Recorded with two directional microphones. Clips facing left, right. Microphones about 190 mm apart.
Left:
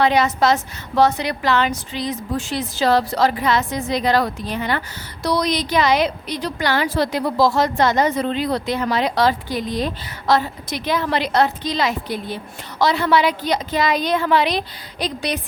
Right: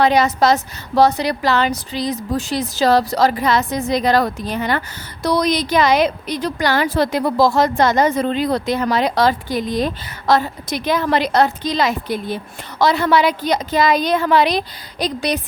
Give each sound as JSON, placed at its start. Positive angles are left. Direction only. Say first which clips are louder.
{"t": 0.0, "sound": "a woman's voice", "louder": "right 2 dB", "side_deg": -40}